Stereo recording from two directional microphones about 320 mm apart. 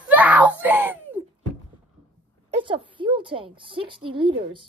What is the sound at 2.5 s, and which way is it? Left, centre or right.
A woman's voice, centre.